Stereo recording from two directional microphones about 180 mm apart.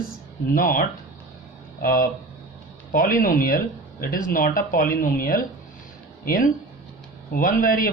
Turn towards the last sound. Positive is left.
turn(degrees=50)  # may be behind; listen again after turning